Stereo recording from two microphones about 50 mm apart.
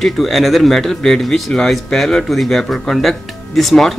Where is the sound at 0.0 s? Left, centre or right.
Centre.